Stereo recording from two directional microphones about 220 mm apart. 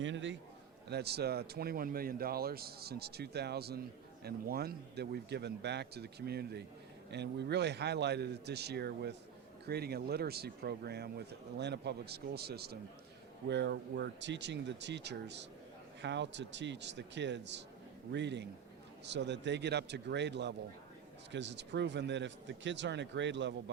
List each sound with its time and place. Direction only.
0.0 s a man's voice: 55° right (ahead or behind)